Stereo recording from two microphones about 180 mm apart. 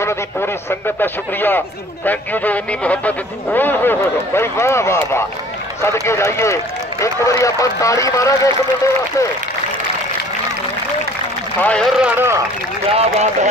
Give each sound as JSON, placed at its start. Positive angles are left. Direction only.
{"t": 0.0, "sound": "speech", "side_deg": 15}
{"t": 11.6, "sound": "a man's voice", "side_deg": 5}
{"t": 12.0, "sound": "a man's voice", "side_deg": -15}
{"t": 12.9, "sound": "speech", "side_deg": -40}